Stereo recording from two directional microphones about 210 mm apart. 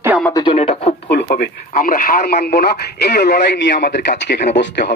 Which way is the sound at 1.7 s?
40° left (ahead or behind).